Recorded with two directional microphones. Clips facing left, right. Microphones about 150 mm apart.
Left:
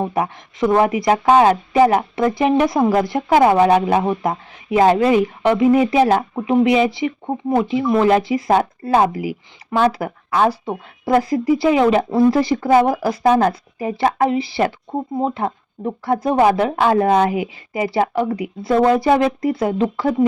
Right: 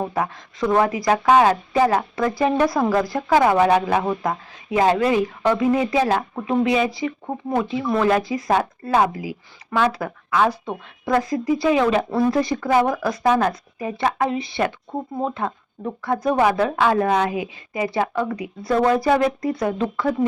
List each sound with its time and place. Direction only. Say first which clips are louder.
0.1 s speech: left 3 dB; 20° left (ahead or behind)